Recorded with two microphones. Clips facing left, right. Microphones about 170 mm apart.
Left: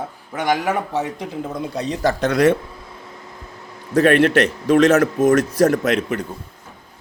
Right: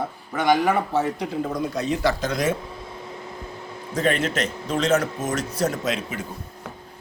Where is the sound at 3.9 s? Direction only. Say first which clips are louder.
Left 9 dB; 65° left (ahead or behind).